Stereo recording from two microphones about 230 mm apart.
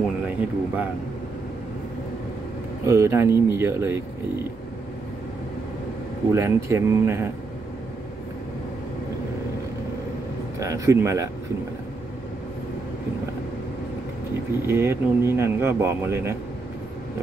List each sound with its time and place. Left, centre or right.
0.3 s speech: centre
2.9 s speech: centre
6.3 s speech: centre
10.6 s speech: centre
14.7 s speech: centre